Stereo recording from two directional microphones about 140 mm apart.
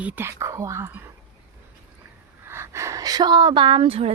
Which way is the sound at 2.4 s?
20° right (ahead or behind).